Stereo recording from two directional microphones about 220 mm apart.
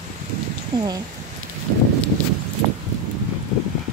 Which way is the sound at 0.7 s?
15° right (ahead or behind).